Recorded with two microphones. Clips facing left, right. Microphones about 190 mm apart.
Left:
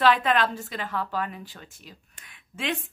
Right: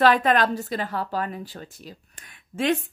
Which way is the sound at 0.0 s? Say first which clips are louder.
Right 3 dB; 45° right (ahead or behind).